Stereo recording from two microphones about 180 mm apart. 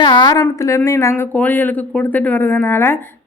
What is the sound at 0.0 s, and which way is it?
A woman's voice, 25° left (ahead or behind).